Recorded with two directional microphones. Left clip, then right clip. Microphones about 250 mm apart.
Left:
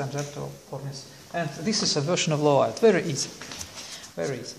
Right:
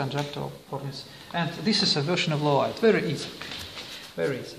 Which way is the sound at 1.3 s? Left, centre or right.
Left.